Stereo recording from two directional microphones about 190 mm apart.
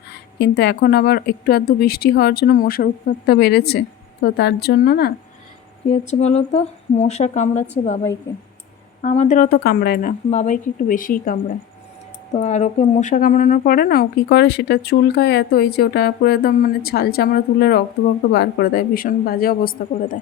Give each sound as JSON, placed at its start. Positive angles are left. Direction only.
{"t": 0.1, "sound": "a woman's voice", "side_deg": 60}
{"t": 5.9, "sound": "speech", "side_deg": 35}
{"t": 9.0, "sound": "a woman's voice", "side_deg": 40}
{"t": 12.3, "sound": "a woman's voice", "side_deg": 35}